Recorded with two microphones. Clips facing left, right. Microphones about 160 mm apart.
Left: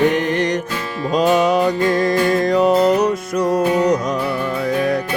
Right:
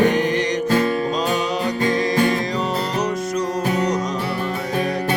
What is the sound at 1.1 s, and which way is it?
Music, 60° left (ahead or behind).